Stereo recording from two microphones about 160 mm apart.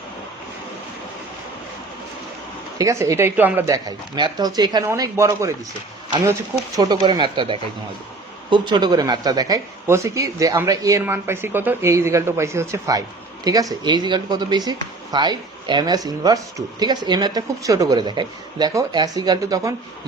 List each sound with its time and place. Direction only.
2.7 s a woman's voice: 20° right (ahead or behind)
3.8 s speech: 25° right (ahead or behind)
6.7 s speech: 25° right (ahead or behind)